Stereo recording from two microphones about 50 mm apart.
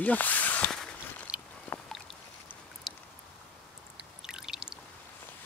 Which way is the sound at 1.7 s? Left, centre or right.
Left.